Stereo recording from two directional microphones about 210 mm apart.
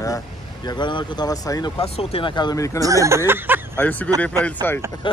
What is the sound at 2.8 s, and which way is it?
Speech, 15° right (ahead or behind).